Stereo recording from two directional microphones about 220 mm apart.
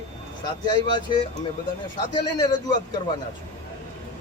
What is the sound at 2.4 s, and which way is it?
Speech, 15° left (ahead or behind).